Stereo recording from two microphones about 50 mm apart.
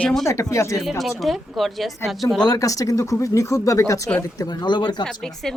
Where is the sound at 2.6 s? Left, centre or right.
Left.